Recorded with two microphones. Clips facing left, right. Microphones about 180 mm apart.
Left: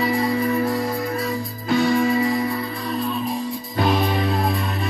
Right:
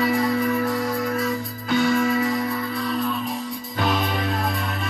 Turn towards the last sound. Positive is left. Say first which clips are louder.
# left 3 dB
turn(degrees=35)  # may be behind; listen again after turning